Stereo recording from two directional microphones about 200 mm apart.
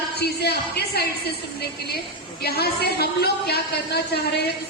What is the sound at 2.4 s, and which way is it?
A woman's voice, 50° left (ahead or behind).